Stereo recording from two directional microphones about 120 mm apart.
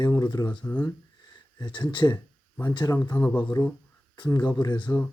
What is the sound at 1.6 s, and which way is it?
Mantra, 40° left (ahead or behind).